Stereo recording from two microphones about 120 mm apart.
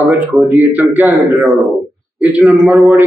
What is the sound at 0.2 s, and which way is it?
A man's voice, 15° right (ahead or behind).